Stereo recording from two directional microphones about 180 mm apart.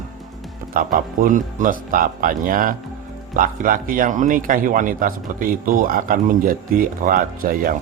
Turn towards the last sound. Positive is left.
turn(degrees=-50)  # may be behind; listen again after turning